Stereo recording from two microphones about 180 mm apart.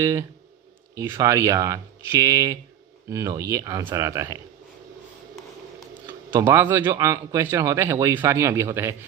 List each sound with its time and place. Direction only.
0.0 s speech: 20° right (ahead or behind)
6.3 s speech: 15° right (ahead or behind)